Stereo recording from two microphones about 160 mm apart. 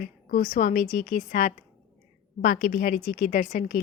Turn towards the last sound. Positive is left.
turn(degrees=60)  # may be behind; listen again after turning